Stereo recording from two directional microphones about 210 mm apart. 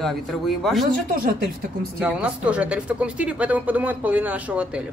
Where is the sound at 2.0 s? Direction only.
5° right (ahead or behind).